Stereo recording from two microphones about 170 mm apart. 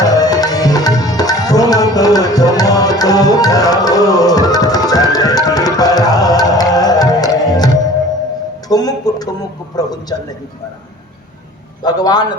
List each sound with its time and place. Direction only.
0.0 s tabla: 20° left (ahead or behind)
8.7 s a sound: 20° left (ahead or behind)
9.7 s a man's voice: 25° left (ahead or behind)
11.8 s a man's voice: 25° left (ahead or behind)